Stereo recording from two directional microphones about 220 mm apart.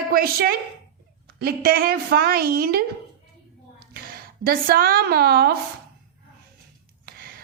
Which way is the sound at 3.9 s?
45° right (ahead or behind).